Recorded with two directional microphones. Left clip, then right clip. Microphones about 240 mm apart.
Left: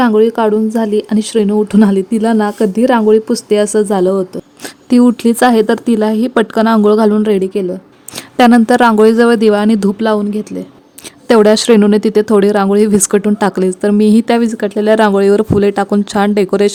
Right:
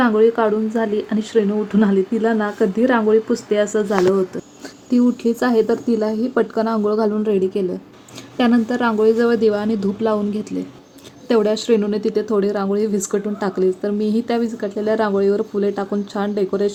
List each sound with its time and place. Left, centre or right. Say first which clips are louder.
0.0 s speech: left 5 dB; left
3.7 s speech: left 5 dB; left
11.3 s speech: left 9 dB; left